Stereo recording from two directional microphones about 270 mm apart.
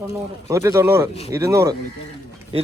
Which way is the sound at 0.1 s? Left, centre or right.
Centre.